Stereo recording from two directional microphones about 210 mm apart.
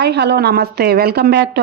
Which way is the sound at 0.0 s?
50° right (ahead or behind).